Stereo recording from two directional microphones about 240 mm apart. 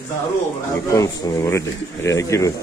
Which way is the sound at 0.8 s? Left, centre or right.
Centre.